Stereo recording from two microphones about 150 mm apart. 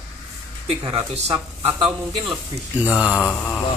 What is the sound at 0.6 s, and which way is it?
Speech, 35° right (ahead or behind).